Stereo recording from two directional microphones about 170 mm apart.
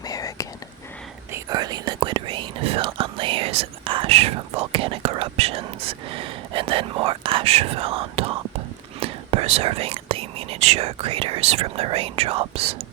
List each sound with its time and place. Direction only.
0.0 s whispering: 20° left (ahead or behind)
1.3 s speech: 20° right (ahead or behind)